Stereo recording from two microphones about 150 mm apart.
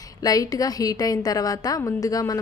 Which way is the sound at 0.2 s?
25° left (ahead or behind).